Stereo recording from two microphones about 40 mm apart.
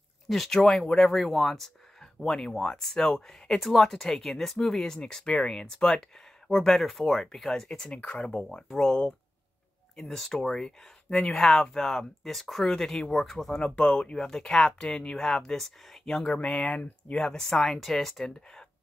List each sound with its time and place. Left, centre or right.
0.3 s speech: centre
6.7 s speech: centre
7.6 s speech: left
8.7 s speech: centre
12.7 s speech: centre
13.6 s speech: left
14.1 s speech: centre
16.3 s speech: left; by 18.2 s centre
18.2 s speech: centre